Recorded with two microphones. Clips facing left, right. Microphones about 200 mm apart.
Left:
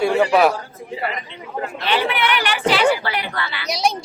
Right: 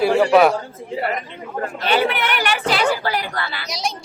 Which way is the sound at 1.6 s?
45° right (ahead or behind).